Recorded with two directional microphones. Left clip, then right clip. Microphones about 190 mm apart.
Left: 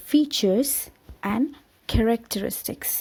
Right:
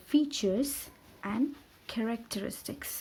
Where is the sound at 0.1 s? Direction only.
35° left (ahead or behind).